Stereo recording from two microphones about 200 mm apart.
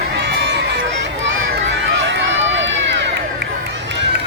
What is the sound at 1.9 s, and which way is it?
Run, 65° right (ahead or behind).